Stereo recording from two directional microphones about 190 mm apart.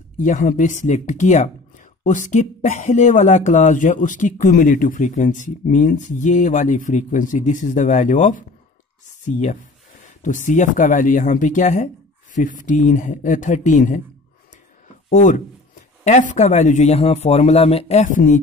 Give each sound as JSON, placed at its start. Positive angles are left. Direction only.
{"t": 0.2, "sound": "speech", "side_deg": 40}
{"t": 15.0, "sound": "speech", "side_deg": 40}